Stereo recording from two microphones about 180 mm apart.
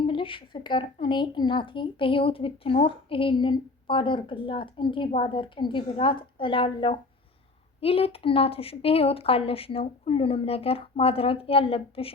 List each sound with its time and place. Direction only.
0.0 s a woman's voice: 30° left (ahead or behind)